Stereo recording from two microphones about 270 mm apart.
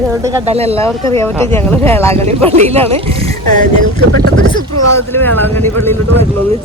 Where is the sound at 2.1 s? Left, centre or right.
Right.